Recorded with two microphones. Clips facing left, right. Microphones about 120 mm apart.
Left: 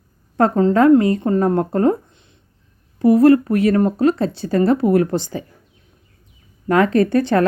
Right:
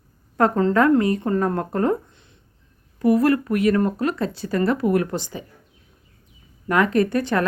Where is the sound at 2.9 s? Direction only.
30° left (ahead or behind).